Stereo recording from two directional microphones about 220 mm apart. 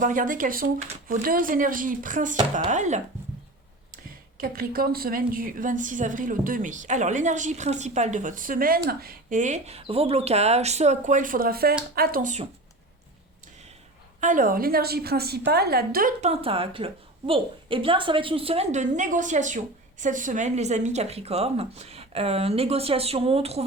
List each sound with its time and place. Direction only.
0.0 s a woman's voice: 35° right (ahead or behind)
14.2 s a woman's voice: 35° right (ahead or behind)